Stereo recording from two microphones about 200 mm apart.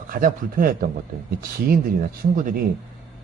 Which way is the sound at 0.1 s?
45° right (ahead or behind).